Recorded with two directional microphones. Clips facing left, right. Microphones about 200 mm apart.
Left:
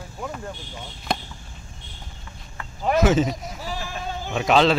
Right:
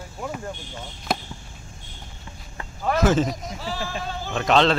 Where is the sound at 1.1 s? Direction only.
5° right (ahead or behind).